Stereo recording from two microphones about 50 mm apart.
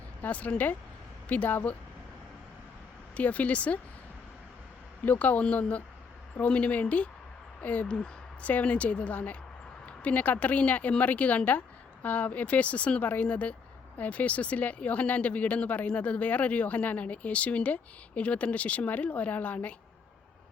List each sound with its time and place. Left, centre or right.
0.2 s speech: left
3.2 s speech: left
5.0 s speech: left
7.9 s speech: centre